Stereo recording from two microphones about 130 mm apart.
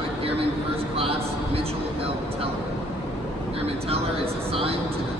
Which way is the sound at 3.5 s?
50° right (ahead or behind).